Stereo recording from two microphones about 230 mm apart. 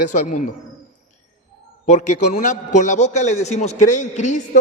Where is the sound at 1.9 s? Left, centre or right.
Left.